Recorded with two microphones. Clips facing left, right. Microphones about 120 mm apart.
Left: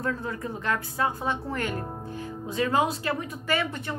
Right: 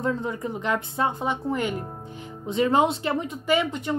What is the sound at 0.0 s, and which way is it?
Speech, 20° right (ahead or behind).